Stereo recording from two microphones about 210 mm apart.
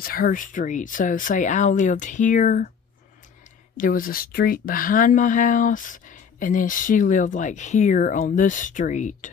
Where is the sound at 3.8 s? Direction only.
40° left (ahead or behind).